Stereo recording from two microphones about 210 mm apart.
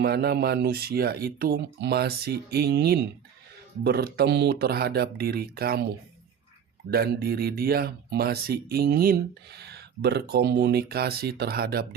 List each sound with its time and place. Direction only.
0.0 s speech: 50° right (ahead or behind)
6.9 s speech: 45° right (ahead or behind)